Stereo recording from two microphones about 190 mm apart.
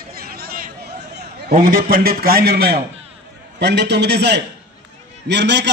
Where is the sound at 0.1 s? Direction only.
50° right (ahead or behind).